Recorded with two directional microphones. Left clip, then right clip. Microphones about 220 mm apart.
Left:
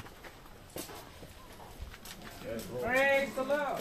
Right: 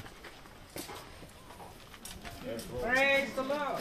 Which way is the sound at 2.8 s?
Centre (ahead or behind).